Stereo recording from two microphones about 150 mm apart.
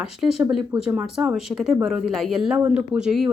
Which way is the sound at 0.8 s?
5° right (ahead or behind).